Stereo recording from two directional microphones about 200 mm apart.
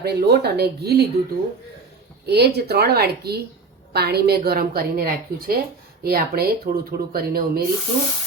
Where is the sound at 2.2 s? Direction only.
55° right (ahead or behind).